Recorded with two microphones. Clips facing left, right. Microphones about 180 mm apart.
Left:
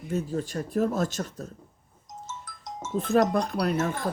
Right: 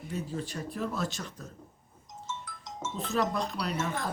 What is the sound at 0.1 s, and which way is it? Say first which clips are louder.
Speech: left 7 dB; 45° left (ahead or behind).